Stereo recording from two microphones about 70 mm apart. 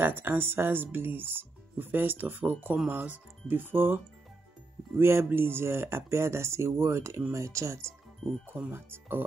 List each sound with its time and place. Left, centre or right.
0.0 s speech: right
8.5 s speech: right